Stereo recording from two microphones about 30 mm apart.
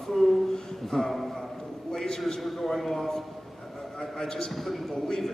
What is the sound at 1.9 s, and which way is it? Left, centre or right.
Speech, left.